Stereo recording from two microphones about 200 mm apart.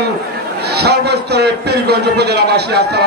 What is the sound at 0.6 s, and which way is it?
A man's voice, 55° right (ahead or behind).